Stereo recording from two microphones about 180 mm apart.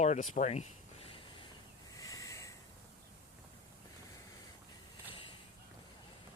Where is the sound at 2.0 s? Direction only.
20° left (ahead or behind).